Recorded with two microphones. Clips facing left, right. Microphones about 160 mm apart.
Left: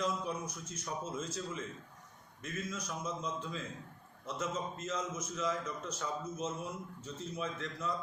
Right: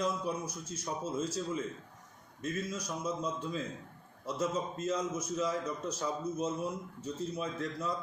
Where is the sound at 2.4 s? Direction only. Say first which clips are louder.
Right 5 dB; 35° right (ahead or behind).